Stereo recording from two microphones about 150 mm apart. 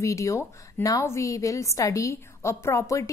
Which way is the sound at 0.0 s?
20° left (ahead or behind).